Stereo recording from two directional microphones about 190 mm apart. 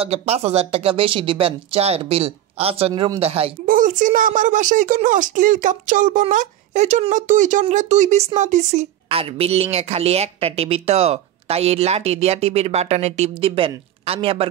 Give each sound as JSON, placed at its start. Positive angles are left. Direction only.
{"t": 0.0, "sound": "a woman's voice", "side_deg": -30}
{"t": 2.9, "sound": "speech", "side_deg": -20}
{"t": 3.2, "sound": "a woman's voice", "side_deg": -30}
{"t": 3.6, "sound": "a woman's voice", "side_deg": -45}